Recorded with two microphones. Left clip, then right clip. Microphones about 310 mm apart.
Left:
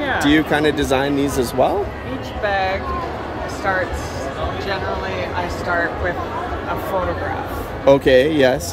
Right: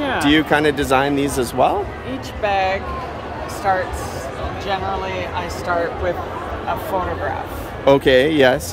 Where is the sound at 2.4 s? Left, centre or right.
Right.